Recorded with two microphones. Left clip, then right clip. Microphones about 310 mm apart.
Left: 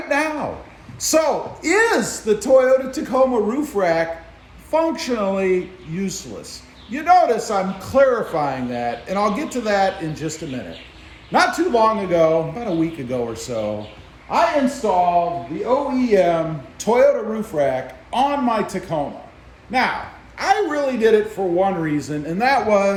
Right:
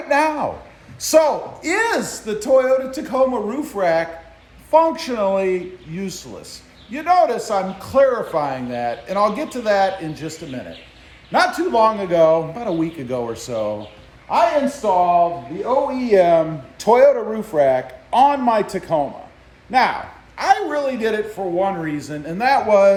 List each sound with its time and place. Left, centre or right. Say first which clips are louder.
0.1 s speech: right 4 dB; centre